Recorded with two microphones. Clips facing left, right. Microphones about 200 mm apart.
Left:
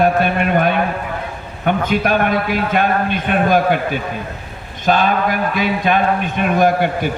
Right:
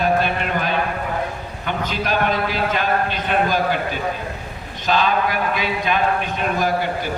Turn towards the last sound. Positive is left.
turn(degrees=55)  # may be behind; listen again after turning